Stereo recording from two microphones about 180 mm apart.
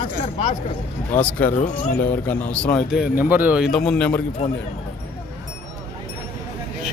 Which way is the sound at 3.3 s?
10° right (ahead or behind).